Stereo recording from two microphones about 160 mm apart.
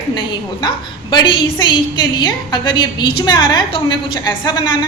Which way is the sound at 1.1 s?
30° left (ahead or behind).